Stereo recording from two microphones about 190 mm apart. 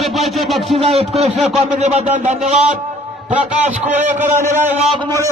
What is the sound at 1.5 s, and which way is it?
A man's voice, 35° right (ahead or behind).